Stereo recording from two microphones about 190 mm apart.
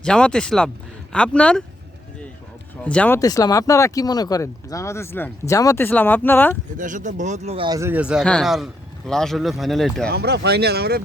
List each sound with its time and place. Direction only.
0.0 s a man's voice: 5° left (ahead or behind)
2.8 s speech: 5° left (ahead or behind)
3.2 s speech: 20° left (ahead or behind)
6.7 s speech: 40° right (ahead or behind)
7.8 s a man's voice: 10° right (ahead or behind)
10.1 s speech: 60° right (ahead or behind)